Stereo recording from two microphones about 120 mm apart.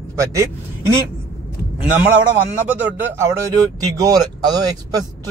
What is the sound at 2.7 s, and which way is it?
Speech, 20° right (ahead or behind).